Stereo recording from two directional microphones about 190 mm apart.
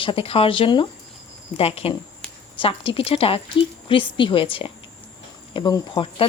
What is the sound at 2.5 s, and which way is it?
Speech, 30° left (ahead or behind).